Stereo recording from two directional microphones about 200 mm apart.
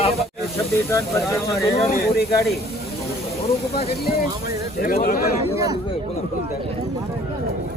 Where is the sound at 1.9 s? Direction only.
50° left (ahead or behind).